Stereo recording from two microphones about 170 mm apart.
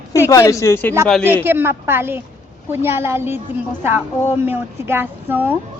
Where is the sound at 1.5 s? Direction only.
15° right (ahead or behind).